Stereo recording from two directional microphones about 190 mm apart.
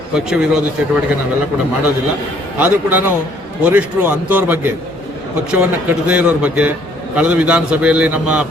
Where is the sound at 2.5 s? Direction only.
10° right (ahead or behind).